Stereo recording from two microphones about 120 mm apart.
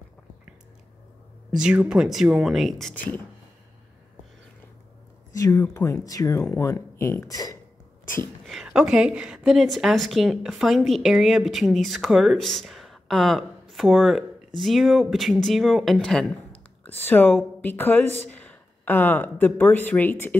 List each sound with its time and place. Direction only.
1.5 s a woman's voice: 5° right (ahead or behind)
2.9 s speech: 15° left (ahead or behind)
5.6 s speech: 25° left (ahead or behind)
8.6 s a woman's voice: 10° right (ahead or behind); by 20.3 s 15° left (ahead or behind)